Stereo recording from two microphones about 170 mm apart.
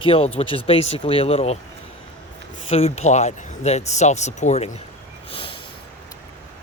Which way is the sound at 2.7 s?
40° left (ahead or behind).